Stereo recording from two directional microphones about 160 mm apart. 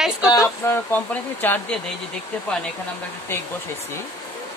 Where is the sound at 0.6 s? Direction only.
15° left (ahead or behind).